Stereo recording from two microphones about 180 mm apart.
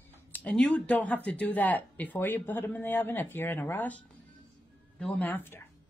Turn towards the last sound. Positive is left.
turn(degrees=10)  # may be behind; listen again after turning